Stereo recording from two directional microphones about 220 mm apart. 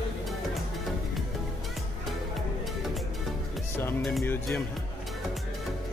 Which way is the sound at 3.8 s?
5° left (ahead or behind).